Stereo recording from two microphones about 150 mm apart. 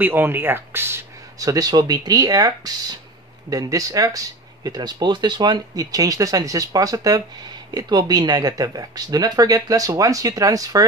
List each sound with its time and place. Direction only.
0.0 s speech: 15° right (ahead or behind)